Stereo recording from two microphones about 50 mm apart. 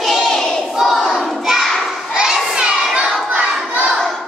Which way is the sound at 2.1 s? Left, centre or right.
Centre.